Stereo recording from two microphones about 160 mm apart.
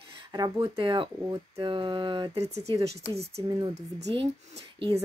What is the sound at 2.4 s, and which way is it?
Speech, 40° right (ahead or behind).